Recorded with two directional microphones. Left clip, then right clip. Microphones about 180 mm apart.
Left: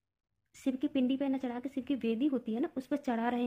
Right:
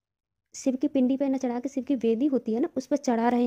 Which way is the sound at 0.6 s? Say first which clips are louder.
Right 7 dB; 50° right (ahead or behind).